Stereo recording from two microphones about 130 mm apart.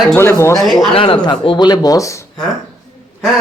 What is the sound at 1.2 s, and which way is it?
Speech, 35° left (ahead or behind).